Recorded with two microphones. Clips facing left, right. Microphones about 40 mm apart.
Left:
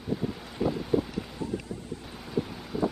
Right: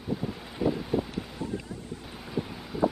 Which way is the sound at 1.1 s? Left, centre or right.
Right.